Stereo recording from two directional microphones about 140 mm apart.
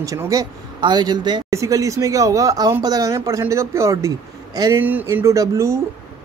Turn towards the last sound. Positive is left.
turn(degrees=-20)  # may be behind; listen again after turning